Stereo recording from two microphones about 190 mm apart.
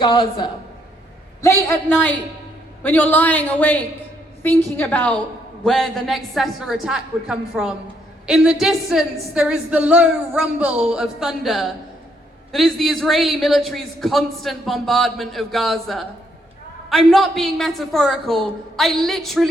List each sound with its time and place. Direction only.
0.0 s a man's voice: 25° left (ahead or behind)
1.4 s a man's voice: 15° left (ahead or behind)